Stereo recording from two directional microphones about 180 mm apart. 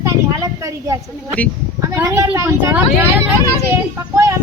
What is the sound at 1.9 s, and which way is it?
Vehicle, 15° right (ahead or behind).